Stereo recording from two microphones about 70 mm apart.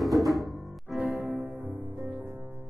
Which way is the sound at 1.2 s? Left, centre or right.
Right.